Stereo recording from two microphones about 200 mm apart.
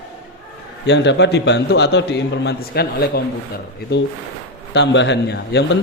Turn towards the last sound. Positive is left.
turn(degrees=55)  # may be behind; listen again after turning